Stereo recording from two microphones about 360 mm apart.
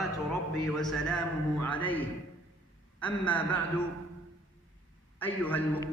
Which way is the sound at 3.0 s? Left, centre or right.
Centre.